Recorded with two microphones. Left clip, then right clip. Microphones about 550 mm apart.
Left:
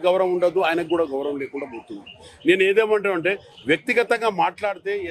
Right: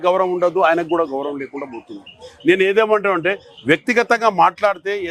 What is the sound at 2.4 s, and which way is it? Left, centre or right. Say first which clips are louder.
A man's voice: right 3 dB; right.